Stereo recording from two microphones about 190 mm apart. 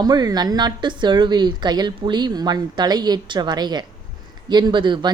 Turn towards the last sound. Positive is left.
turn(degrees=-25)  # may be behind; listen again after turning